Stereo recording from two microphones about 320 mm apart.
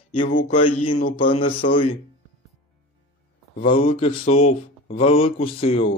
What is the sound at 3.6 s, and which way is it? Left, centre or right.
Speech, centre.